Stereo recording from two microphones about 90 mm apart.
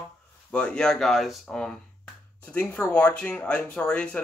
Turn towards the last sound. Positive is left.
turn(degrees=10)  # may be behind; listen again after turning